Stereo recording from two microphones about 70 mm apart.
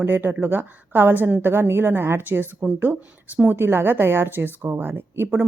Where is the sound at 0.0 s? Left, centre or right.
Right.